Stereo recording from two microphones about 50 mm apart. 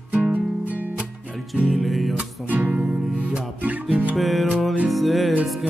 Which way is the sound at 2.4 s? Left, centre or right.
Right.